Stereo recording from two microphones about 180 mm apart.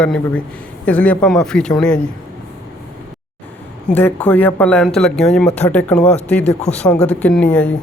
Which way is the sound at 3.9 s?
10° left (ahead or behind).